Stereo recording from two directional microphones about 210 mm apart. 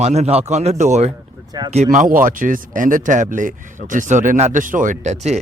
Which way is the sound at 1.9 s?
40° right (ahead or behind).